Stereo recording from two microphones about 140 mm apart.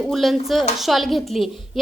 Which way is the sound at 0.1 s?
Centre (ahead or behind).